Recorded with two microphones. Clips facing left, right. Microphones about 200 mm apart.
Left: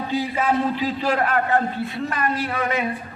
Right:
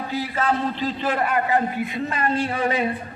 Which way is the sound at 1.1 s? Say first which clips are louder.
Left 1 dB; 10° right (ahead or behind).